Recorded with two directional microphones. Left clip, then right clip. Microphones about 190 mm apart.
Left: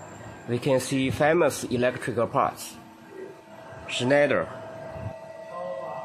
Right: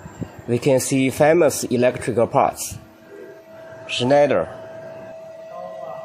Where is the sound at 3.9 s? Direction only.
20° right (ahead or behind).